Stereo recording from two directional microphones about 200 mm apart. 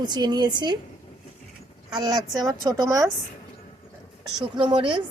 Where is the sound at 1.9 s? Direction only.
20° right (ahead or behind).